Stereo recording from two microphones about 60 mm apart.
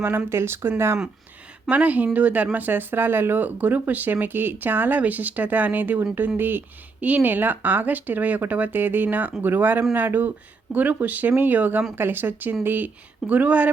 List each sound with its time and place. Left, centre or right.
0.3 s speech: right
1.7 s speech: right